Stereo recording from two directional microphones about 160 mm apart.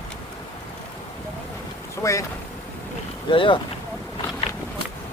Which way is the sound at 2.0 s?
20° left (ahead or behind).